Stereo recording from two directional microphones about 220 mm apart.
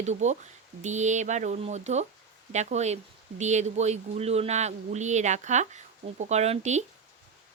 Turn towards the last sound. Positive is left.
turn(degrees=-30)  # may be behind; listen again after turning